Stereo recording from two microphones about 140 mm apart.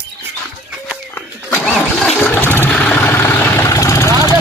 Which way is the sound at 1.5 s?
5° left (ahead or behind).